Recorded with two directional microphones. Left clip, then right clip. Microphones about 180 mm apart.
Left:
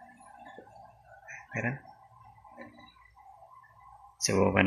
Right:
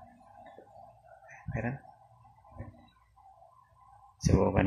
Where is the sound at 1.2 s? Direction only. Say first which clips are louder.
Left 4 dB; 15° right (ahead or behind).